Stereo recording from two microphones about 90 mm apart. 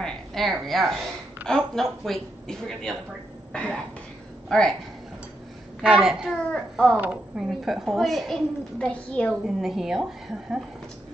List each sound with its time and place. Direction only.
0.0 s a woman's voice: 5° left (ahead or behind)
5.8 s a child's voice: 5° right (ahead or behind)
7.0 s speech: 15° right (ahead or behind)
7.4 s a woman's voice: centre (ahead or behind)
8.7 s a child's voice: 10° left (ahead or behind)
9.3 s a woman's voice: 5° right (ahead or behind)